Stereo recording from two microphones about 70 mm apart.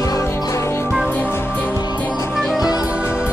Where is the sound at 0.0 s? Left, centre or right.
Left.